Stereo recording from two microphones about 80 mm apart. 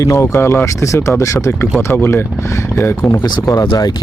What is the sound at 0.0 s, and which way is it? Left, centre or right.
Speech, left.